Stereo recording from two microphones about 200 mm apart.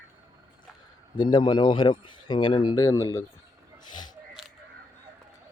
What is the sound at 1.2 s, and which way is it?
Speech, 20° left (ahead or behind).